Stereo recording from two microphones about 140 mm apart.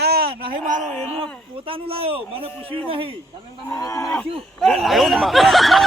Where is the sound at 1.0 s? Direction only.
45° right (ahead or behind).